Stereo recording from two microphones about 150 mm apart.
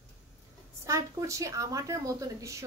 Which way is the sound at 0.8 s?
20° right (ahead or behind).